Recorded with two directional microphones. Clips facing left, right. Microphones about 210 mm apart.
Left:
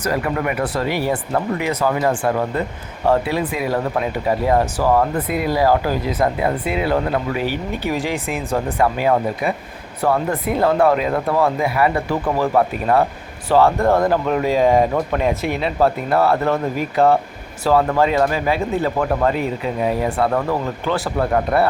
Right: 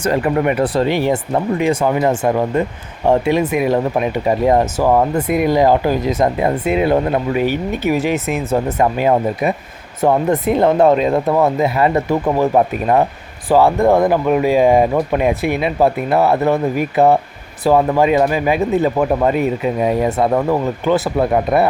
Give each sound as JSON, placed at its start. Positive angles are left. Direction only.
{"t": 0.0, "sound": "speech", "side_deg": -25}